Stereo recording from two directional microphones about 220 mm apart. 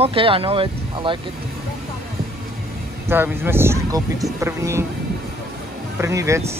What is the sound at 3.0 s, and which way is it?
Speech, 10° right (ahead or behind).